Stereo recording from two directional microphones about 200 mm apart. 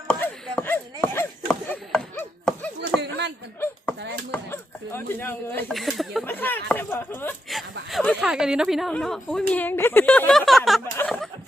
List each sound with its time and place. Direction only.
0.1 s chop: 5° left (ahead or behind)
1.6 s a sound: 5° left (ahead or behind)
3.0 s a sound: 60° right (ahead or behind)
4.3 s speech: 10° left (ahead or behind)
7.5 s speech: centre (ahead or behind)
10.9 s snicker: 5° left (ahead or behind)